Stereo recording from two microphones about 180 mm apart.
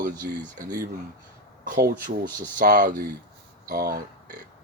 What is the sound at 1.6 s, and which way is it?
Speech, 60° right (ahead or behind).